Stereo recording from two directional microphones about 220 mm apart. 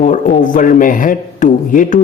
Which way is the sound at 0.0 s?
35° left (ahead or behind).